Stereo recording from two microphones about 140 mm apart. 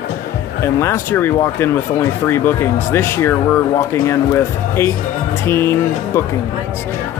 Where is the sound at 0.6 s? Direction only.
20° left (ahead or behind).